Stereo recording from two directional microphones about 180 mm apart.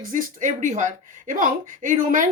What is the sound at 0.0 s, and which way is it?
A woman's voice, 50° right (ahead or behind).